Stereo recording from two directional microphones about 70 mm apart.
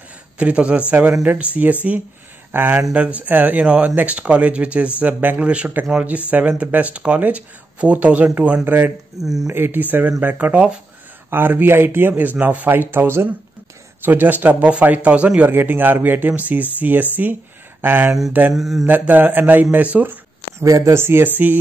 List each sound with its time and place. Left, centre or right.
0.4 s speech: centre
9.2 s mantra: centre
9.5 s speech: right
11.2 s speech: right
18.5 s mantra: centre
18.9 s speech: right
20.6 s speech: right
20.9 s speech: right